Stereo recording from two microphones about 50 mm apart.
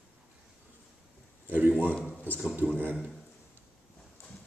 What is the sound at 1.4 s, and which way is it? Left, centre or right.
Speech, right.